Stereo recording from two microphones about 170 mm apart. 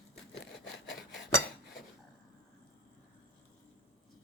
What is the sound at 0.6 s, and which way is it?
Sawing, 90° left.